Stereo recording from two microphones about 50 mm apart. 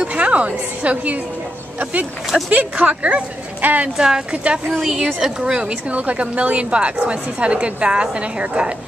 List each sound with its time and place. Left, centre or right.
0.1 s a woman's voice: right
2.5 s a woman's voice: right
3.9 s speech: centre
4.6 s a woman's voice: centre
5.4 s a woman's voice: centre
5.9 s a woman's voice: right